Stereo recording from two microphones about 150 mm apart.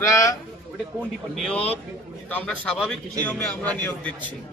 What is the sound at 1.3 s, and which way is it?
A man's voice, 5° left (ahead or behind).